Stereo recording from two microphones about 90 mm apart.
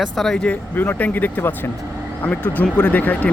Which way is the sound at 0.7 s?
25° left (ahead or behind).